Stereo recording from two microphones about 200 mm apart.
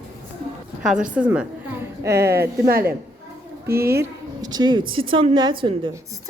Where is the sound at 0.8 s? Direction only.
5° right (ahead or behind).